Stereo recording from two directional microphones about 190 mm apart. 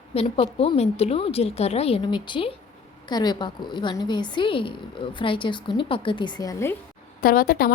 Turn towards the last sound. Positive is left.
turn(degrees=50)  # may be behind; listen again after turning